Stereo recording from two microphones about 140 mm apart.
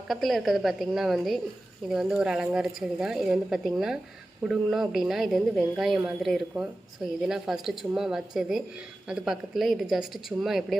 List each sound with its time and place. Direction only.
0.1 s speech: centre (ahead or behind)